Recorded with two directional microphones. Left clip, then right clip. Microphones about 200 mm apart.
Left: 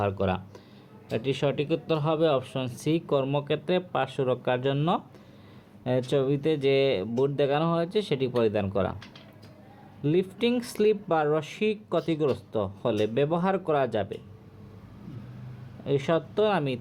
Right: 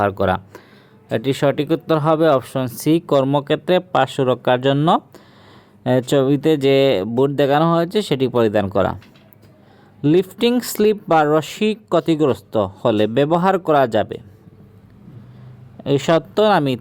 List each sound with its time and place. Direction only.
0.0 s speech: 50° right (ahead or behind)
10.0 s speech: 55° right (ahead or behind)
15.8 s speech: 55° right (ahead or behind)